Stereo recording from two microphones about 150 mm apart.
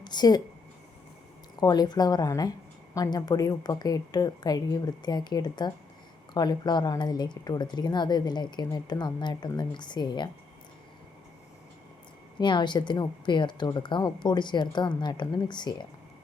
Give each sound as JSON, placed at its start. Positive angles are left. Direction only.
{"t": 0.0, "sound": "a woman's voice", "side_deg": 30}
{"t": 1.6, "sound": "speech", "side_deg": 25}
{"t": 12.4, "sound": "speech", "side_deg": 30}